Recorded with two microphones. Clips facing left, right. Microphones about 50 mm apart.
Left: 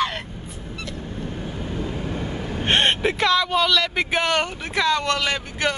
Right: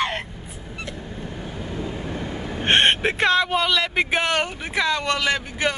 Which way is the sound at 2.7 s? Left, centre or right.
Right.